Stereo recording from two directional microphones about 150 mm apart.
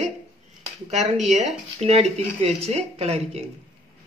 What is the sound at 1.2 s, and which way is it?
Speech, 50° right (ahead or behind).